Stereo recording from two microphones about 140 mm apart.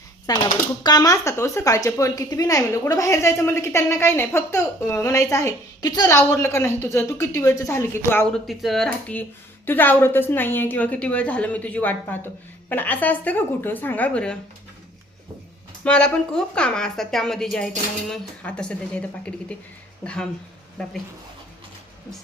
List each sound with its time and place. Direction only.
0.3 s a woman's voice: 25° left (ahead or behind)
6.1 s a woman's voice: 20° left (ahead or behind)
8.2 s a woman's voice: centre (ahead or behind)
15.8 s a woman's voice: 5° left (ahead or behind)